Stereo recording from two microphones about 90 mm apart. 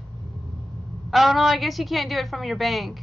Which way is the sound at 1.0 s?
Centre (ahead or behind).